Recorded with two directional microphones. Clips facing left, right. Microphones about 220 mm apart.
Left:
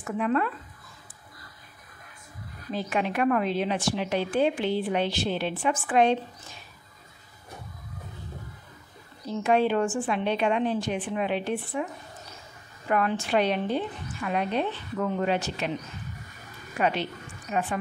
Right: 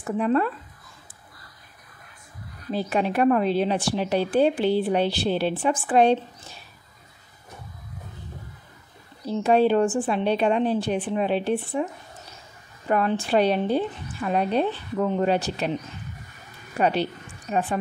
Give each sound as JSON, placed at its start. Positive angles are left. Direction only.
{"t": 0.0, "sound": "a woman's voice", "side_deg": -35}
{"t": 2.7, "sound": "a woman's voice", "side_deg": -35}
{"t": 9.2, "sound": "a woman's voice", "side_deg": -35}
{"t": 16.7, "sound": "a woman's voice", "side_deg": -35}